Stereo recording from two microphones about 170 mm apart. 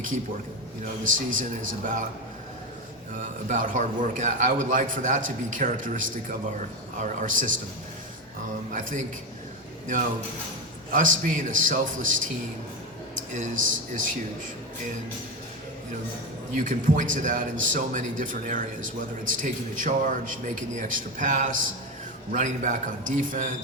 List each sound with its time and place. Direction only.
1.3 s a man's voice: 50° right (ahead or behind)
3.2 s a man's voice: 50° right (ahead or behind)
7.0 s a man's voice: 50° right (ahead or behind)
8.7 s a man's voice: 50° right (ahead or behind)
10.9 s a man's voice: 50° right (ahead or behind)
13.3 s a man's voice: 50° right (ahead or behind)
16.6 s a man's voice: 50° right (ahead or behind)